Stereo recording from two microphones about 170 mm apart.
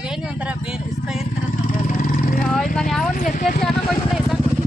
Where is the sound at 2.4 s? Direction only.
Centre (ahead or behind).